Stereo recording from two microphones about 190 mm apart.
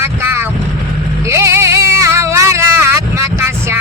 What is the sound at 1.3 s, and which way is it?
Music, 15° right (ahead or behind).